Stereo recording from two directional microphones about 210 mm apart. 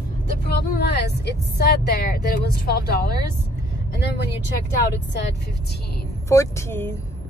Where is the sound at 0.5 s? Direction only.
50° left (ahead or behind).